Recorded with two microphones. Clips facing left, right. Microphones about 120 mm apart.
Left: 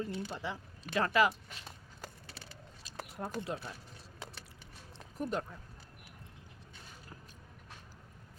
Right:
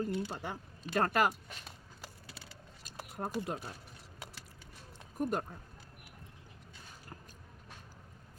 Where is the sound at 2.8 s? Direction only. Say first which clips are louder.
Right 1 dB; 45° right (ahead or behind).